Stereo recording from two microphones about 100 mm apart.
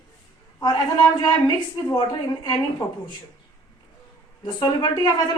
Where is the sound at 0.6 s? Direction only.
45° left (ahead or behind).